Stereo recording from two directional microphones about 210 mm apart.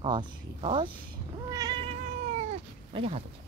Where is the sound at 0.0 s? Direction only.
20° right (ahead or behind).